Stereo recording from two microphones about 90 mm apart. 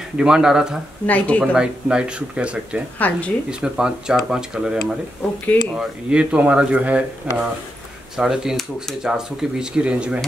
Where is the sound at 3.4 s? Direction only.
10° right (ahead or behind).